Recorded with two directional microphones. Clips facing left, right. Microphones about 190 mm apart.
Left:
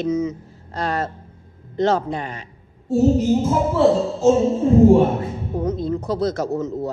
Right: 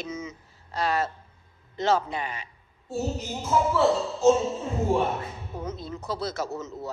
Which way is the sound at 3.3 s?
30° left (ahead or behind).